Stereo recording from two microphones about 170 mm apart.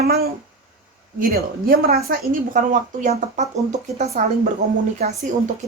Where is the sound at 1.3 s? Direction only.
60° right (ahead or behind); by 4.3 s 40° right (ahead or behind).